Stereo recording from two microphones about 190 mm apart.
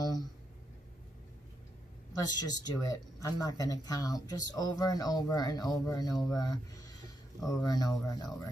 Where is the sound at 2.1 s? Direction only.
20° left (ahead or behind).